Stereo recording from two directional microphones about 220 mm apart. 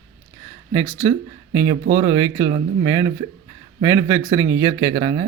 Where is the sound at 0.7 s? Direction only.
15° right (ahead or behind).